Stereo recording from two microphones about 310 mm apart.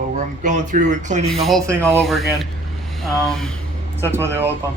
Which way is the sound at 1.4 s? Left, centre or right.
Centre.